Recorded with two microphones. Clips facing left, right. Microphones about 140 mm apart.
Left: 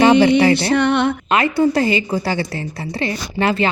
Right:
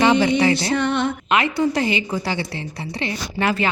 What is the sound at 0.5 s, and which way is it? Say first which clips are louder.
Music: left 5 dB; 65° left (ahead or behind).